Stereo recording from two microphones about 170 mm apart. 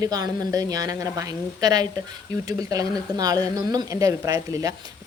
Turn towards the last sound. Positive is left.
turn(degrees=-20)  # may be behind; listen again after turning